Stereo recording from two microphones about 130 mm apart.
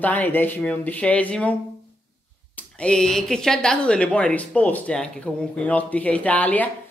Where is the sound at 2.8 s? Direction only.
5° left (ahead or behind).